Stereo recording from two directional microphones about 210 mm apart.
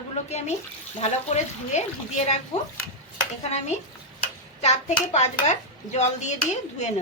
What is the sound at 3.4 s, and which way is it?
Speech, 30° left (ahead or behind).